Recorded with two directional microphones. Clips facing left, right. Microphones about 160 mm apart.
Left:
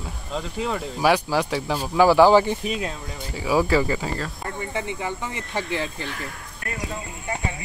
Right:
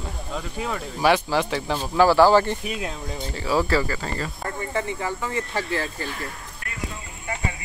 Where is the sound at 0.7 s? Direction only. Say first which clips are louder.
Even; 5° left (ahead or behind).